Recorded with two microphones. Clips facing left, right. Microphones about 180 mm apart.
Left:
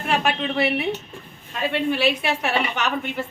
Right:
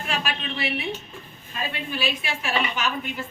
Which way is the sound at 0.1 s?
65° left (ahead or behind).